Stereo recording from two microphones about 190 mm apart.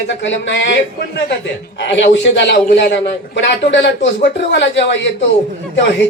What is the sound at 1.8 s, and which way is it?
A man's voice, 65° left (ahead or behind).